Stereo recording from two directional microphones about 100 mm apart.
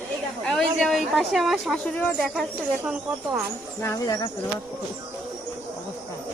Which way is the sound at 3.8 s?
35° left (ahead or behind).